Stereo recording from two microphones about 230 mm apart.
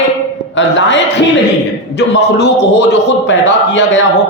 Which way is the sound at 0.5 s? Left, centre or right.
Left.